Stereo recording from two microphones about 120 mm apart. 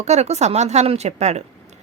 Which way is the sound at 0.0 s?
70° right (ahead or behind).